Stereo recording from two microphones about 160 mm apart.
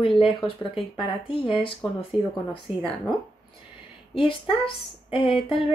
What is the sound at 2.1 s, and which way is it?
Speech, 5° right (ahead or behind).